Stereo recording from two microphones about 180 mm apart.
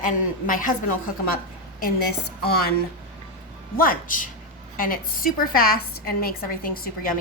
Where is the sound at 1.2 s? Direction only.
55° left (ahead or behind).